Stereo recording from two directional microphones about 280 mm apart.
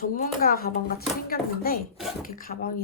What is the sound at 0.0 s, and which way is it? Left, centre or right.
Speech, left.